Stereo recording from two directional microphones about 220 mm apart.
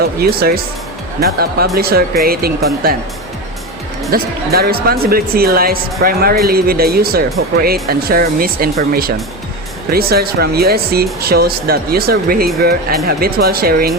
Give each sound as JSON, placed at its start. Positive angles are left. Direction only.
{"t": 0.0, "sound": "speech", "side_deg": -45}
{"t": 4.1, "sound": "speech", "side_deg": -45}